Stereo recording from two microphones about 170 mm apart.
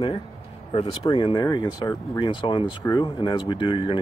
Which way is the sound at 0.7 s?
30° left (ahead or behind).